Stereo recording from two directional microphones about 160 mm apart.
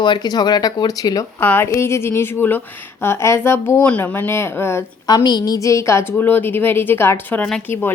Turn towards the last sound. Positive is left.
turn(degrees=5)  # may be behind; listen again after turning